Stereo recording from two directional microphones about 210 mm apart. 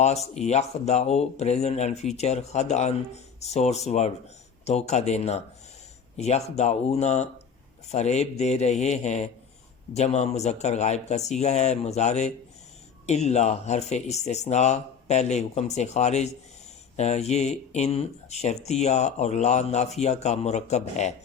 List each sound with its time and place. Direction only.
0.0 s speech: 30° left (ahead or behind)